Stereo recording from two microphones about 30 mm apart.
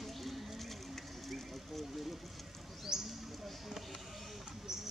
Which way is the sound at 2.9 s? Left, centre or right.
Right.